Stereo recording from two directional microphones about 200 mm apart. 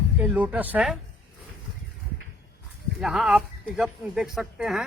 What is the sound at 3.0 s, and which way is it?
Speech, centre (ahead or behind).